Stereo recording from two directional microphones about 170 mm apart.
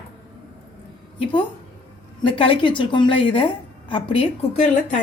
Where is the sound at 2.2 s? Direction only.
30° left (ahead or behind).